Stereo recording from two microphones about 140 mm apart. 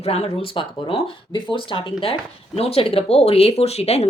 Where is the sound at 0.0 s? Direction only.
40° left (ahead or behind).